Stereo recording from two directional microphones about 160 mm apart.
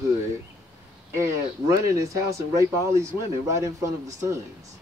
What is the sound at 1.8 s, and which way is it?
Speech, 20° right (ahead or behind).